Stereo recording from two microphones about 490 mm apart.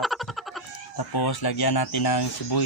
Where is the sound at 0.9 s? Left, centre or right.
Left.